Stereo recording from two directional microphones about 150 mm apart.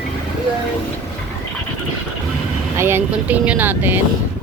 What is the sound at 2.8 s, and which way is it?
Speech, 15° right (ahead or behind).